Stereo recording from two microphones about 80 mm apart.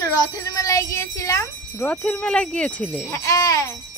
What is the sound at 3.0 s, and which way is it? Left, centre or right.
Speech, left.